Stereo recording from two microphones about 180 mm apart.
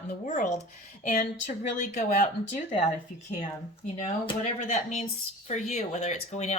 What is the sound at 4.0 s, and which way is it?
Speech, 35° left (ahead or behind).